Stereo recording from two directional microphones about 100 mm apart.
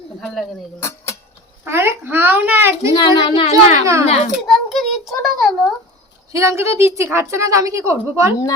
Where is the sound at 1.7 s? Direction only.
25° right (ahead or behind).